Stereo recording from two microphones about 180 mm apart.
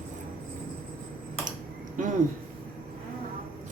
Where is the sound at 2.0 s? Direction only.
45° right (ahead or behind).